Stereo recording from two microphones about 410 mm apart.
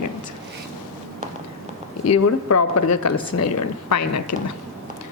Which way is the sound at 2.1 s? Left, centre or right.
Left.